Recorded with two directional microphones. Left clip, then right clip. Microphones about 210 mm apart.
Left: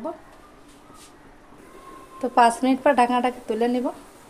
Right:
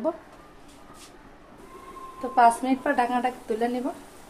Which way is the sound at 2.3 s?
35° left (ahead or behind).